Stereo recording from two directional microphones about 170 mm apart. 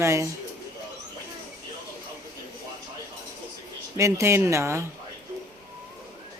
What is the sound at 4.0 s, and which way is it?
Speech, 15° right (ahead or behind).